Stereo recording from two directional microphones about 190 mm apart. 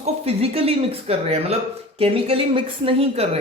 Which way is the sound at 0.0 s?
30° right (ahead or behind).